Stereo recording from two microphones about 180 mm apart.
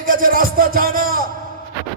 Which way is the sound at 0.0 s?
50° right (ahead or behind).